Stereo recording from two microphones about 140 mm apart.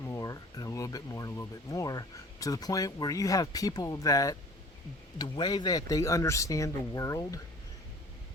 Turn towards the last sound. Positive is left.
turn(degrees=25)  # may be behind; listen again after turning